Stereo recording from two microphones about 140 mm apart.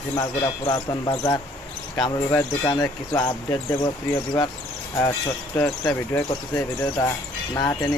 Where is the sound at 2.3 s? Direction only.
25° left (ahead or behind).